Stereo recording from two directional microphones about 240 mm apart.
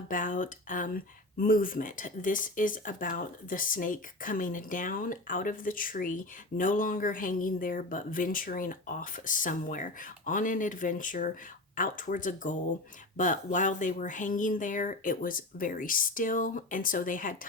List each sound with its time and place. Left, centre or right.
0.1 s speech: left